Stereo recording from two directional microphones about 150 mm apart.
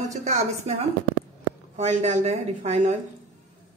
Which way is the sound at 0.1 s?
50° right (ahead or behind).